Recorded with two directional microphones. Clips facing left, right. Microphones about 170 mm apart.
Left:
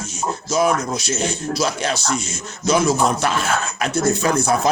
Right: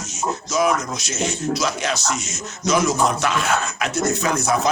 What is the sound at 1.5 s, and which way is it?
Speech, 30° left (ahead or behind).